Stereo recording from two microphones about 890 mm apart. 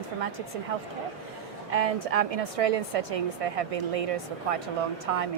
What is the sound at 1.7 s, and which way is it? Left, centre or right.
Speech, right.